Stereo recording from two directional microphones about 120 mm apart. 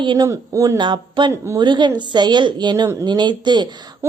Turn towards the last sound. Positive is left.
turn(degrees=-40)  # may be behind; listen again after turning